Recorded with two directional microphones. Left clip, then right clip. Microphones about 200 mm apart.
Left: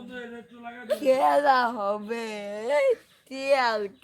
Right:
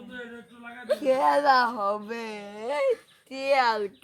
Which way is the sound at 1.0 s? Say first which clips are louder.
Left 2 dB; 15° left (ahead or behind).